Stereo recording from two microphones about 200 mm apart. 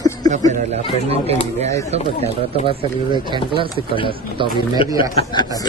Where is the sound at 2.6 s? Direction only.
25° right (ahead or behind).